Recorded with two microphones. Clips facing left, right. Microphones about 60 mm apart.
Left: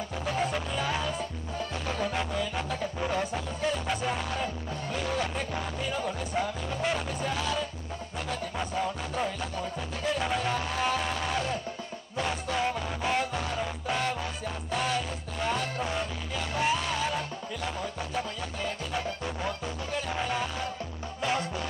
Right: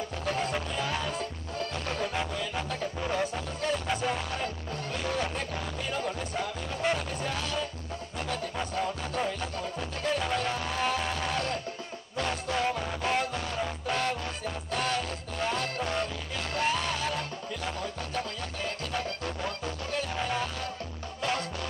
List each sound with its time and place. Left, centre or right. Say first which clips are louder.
0.2 s music: left 1 dB; centre
1.9 s music: left 2 dB; centre
21.2 s music: left 2 dB; centre